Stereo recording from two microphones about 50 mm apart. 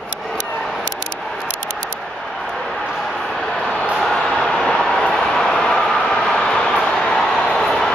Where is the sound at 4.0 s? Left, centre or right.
Centre.